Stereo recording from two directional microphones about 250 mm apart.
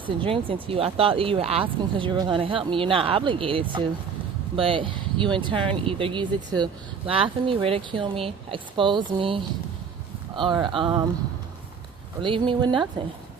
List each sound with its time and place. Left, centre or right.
0.0 s speech: right
12.2 s speech: centre